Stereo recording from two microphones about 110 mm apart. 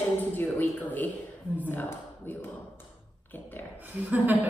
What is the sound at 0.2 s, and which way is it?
Speech, 15° left (ahead or behind).